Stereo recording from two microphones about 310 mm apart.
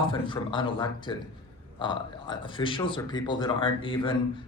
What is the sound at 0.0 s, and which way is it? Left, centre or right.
Speech, centre.